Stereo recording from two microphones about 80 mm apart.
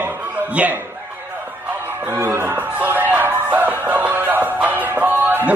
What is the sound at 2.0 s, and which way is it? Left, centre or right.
Music, right.